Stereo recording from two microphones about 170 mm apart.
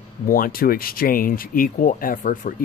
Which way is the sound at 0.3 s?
60° left (ahead or behind).